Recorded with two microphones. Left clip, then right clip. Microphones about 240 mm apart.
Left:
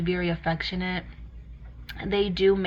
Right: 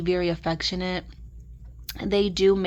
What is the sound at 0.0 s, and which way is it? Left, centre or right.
Speech, right.